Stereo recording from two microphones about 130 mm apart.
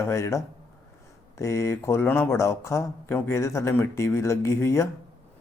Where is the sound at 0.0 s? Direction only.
20° left (ahead or behind).